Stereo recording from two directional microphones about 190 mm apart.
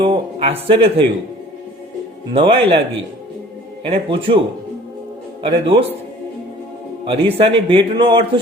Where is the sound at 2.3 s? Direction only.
30° right (ahead or behind).